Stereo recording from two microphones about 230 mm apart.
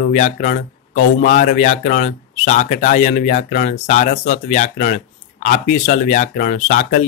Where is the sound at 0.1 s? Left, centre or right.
Left.